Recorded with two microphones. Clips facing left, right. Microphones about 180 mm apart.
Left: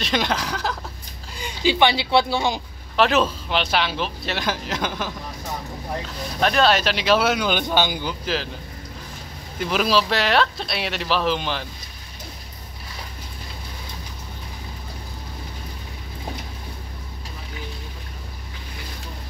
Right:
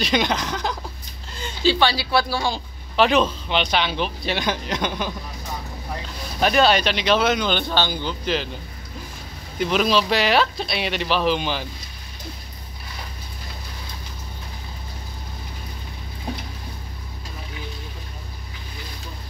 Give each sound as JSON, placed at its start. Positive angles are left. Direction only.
{"t": 0.0, "sound": "a woman's voice", "side_deg": 0}
{"t": 3.0, "sound": "speech", "side_deg": 5}
{"t": 6.4, "sound": "a man's voice", "side_deg": -5}
{"t": 9.6, "sound": "speech", "side_deg": 5}